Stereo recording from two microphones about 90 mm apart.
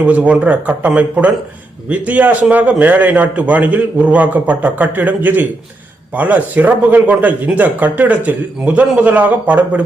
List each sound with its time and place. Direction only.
0.0 s speech: 15° right (ahead or behind)